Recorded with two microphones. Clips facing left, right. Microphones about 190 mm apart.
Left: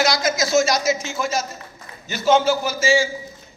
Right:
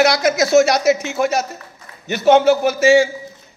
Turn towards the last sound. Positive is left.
turn(degrees=-65)  # may be behind; listen again after turning